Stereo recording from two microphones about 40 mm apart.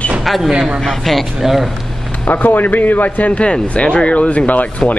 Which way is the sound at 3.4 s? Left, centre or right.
Left.